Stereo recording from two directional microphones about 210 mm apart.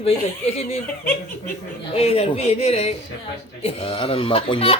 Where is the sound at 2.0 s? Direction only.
30° left (ahead or behind).